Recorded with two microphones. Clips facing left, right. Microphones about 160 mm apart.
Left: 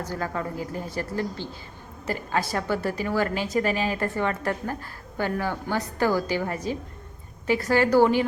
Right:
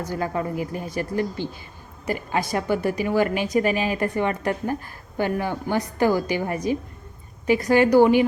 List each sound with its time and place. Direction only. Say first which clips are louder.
0.1 s a woman's voice: right 6 dB; 15° right (ahead or behind)